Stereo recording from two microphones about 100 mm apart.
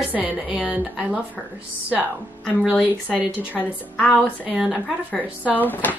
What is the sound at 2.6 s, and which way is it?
Speech, 10° right (ahead or behind).